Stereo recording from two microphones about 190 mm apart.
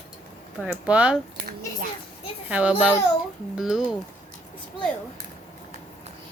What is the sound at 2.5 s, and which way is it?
Speech, 5° right (ahead or behind).